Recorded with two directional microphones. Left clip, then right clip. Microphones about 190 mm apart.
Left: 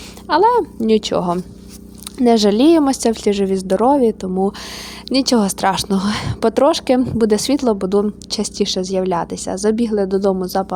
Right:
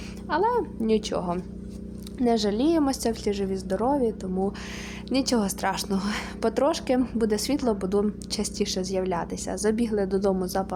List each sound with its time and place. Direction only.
0.3 s a woman's voice: 40° left (ahead or behind)